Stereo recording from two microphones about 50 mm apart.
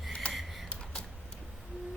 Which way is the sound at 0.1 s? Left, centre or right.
Centre.